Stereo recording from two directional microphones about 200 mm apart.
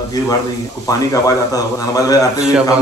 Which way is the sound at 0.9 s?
15° left (ahead or behind).